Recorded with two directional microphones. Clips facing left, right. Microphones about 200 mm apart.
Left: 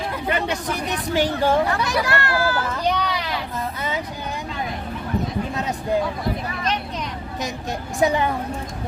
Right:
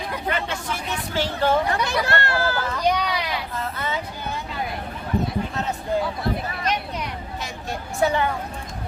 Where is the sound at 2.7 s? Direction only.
10° right (ahead or behind).